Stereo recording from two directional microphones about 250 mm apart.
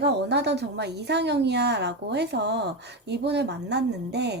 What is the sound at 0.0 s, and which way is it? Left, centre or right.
A woman's voice, right.